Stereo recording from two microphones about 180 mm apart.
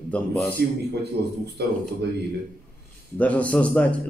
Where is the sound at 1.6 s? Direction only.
70° right (ahead or behind).